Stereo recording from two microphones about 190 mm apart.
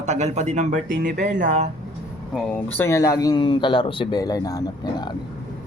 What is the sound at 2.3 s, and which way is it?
A man's voice, 10° left (ahead or behind).